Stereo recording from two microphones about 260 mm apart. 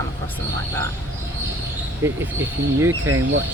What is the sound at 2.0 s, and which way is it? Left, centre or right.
Speech, centre.